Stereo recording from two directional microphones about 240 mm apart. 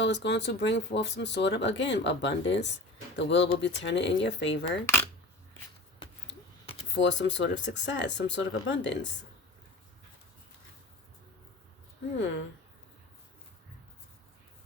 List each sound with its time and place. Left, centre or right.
0.0 s speech: left
6.9 s speech: left
12.1 s speech: left